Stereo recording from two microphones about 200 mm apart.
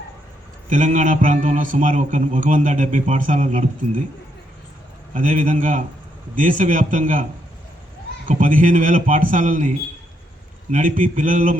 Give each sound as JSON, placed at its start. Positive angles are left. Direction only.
{"t": 0.7, "sound": "a man's voice", "side_deg": -40}
{"t": 5.1, "sound": "a man's voice", "side_deg": -40}
{"t": 8.3, "sound": "a man's voice", "side_deg": -40}